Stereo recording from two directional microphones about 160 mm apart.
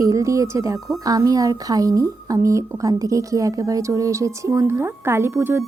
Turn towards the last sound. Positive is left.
turn(degrees=-15)  # may be behind; listen again after turning